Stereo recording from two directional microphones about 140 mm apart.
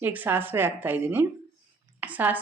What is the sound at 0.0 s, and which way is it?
Speech, 15° right (ahead or behind).